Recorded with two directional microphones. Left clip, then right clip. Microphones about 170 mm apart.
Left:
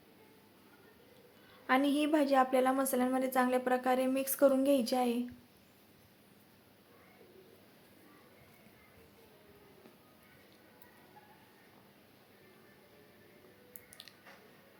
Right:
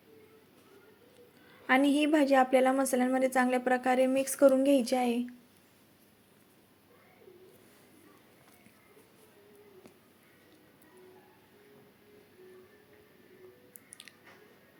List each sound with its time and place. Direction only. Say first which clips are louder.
1.6 s a woman's voice: right 4 dB; 20° right (ahead or behind)